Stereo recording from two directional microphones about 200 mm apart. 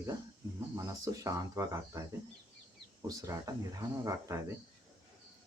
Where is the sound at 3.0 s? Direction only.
15° right (ahead or behind).